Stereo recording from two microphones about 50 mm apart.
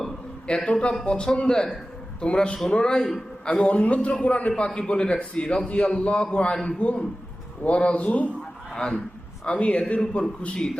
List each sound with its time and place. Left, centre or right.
0.4 s a man's voice: left
8.7 s a man's voice: centre